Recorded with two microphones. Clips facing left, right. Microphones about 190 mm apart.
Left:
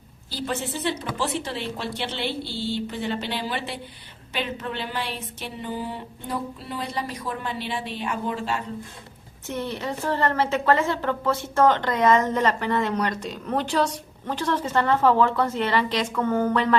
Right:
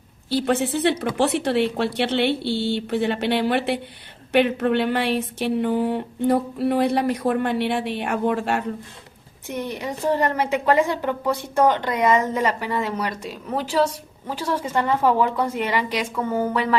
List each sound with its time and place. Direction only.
0.3 s speech: 65° right (ahead or behind)
9.5 s a woman's voice: 15° right (ahead or behind)